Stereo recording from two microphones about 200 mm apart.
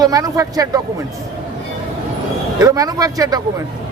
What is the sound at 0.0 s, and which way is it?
Speech, 15° right (ahead or behind).